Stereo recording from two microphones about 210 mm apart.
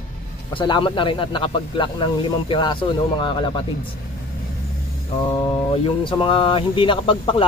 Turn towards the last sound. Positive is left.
turn(degrees=25)  # may be behind; listen again after turning